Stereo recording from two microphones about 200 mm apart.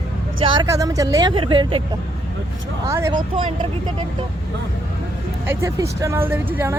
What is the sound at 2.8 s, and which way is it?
Speech, 15° right (ahead or behind).